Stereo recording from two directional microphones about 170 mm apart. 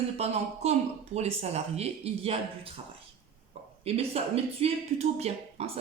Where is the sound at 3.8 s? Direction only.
35° right (ahead or behind).